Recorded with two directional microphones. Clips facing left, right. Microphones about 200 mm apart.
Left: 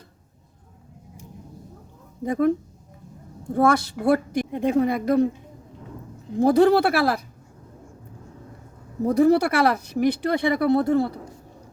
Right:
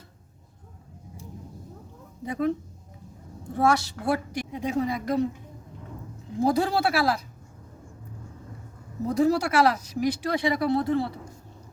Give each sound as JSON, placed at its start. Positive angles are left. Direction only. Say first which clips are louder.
{"t": 2.2, "sound": "speech", "louder": "left 6 dB", "side_deg": 50}
{"t": 3.6, "sound": "speech", "louder": "left 4 dB", "side_deg": 55}
{"t": 6.4, "sound": "speech", "louder": "left 7 dB", "side_deg": 60}
{"t": 9.0, "sound": "speech", "louder": "left 5 dB", "side_deg": 60}